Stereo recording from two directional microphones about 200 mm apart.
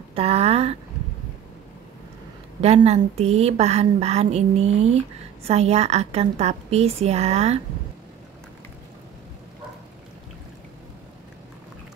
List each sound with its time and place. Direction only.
0.1 s a woman's voice: 30° right (ahead or behind)
2.6 s a woman's voice: 30° right (ahead or behind)